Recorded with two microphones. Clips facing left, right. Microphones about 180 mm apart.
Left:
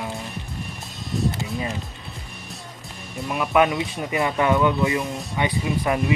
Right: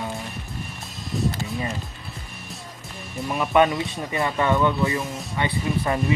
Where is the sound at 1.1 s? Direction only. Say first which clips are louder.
Left 1 dB; centre (ahead or behind).